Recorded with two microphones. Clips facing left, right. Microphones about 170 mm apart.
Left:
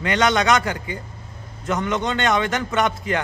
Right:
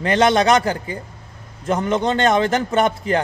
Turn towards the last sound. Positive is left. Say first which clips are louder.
# right 4 dB
turn(degrees=-30)  # may be behind; listen again after turning